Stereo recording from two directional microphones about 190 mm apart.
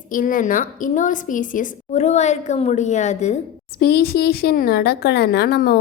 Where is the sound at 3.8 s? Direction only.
55° left (ahead or behind).